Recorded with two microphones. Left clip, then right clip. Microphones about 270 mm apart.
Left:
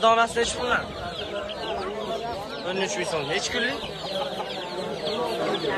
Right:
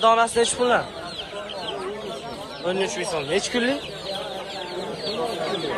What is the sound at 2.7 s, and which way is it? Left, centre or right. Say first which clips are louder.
Speech: right 3 dB; centre.